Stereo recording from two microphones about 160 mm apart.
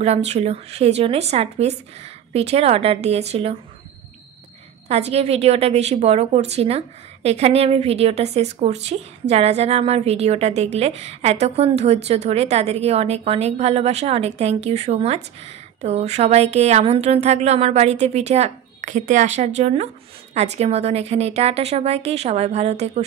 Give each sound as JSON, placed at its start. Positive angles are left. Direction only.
{"t": 0.0, "sound": "a woman's voice", "side_deg": -40}
{"t": 4.8, "sound": "a woman's voice", "side_deg": -40}